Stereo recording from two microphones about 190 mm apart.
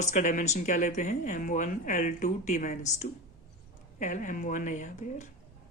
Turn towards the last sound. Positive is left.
turn(degrees=40)  # may be behind; listen again after turning